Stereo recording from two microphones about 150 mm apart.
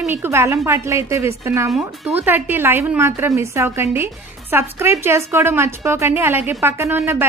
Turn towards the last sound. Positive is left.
turn(degrees=-15)  # may be behind; listen again after turning